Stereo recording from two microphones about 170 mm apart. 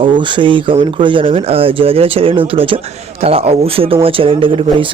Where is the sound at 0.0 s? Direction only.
30° right (ahead or behind).